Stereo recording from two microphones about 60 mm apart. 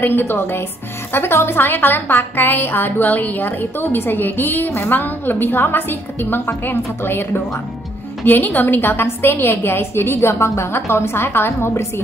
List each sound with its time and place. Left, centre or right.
0.0 s a woman's voice: left
8.3 s a woman's voice: left